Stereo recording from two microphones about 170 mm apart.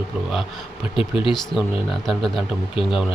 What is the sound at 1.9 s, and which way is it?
Speech, centre (ahead or behind).